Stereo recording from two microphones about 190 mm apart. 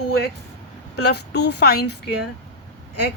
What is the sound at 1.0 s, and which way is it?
Speech, 60° left (ahead or behind).